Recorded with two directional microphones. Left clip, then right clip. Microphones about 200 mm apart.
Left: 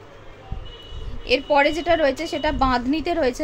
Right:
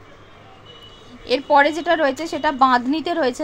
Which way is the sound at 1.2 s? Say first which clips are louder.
Right 2 dB; 15° right (ahead or behind).